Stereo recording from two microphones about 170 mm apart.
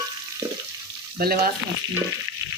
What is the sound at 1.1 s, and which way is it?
Speech, 65° right (ahead or behind).